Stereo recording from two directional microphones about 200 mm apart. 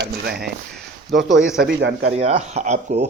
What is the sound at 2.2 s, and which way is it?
Speech, 35° right (ahead or behind).